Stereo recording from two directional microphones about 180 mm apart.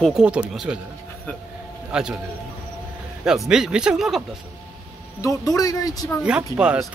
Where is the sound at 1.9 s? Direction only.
5° right (ahead or behind).